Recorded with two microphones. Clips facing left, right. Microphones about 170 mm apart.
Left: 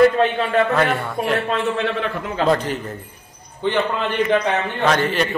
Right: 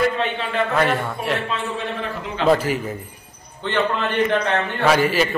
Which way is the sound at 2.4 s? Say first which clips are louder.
Right 2 dB; 5° right (ahead or behind).